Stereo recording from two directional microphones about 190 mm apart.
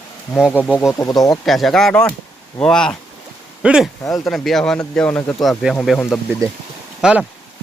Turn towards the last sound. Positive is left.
turn(degrees=-5)  # may be behind; listen again after turning